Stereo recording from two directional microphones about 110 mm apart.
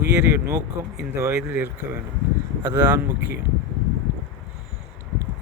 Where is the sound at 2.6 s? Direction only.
35° right (ahead or behind).